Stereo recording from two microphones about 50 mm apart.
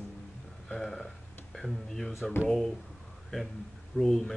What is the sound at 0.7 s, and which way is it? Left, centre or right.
Speech, centre.